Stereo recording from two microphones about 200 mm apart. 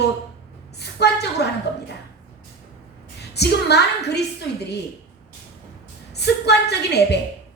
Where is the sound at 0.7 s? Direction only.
55° left (ahead or behind).